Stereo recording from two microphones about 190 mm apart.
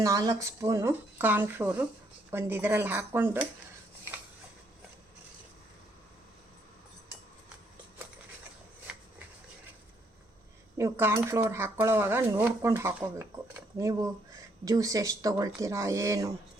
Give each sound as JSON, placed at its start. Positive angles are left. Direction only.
{"t": 0.0, "sound": "speech", "side_deg": -20}
{"t": 8.9, "sound": "shuffling cards", "side_deg": -5}
{"t": 10.8, "sound": "speech", "side_deg": -15}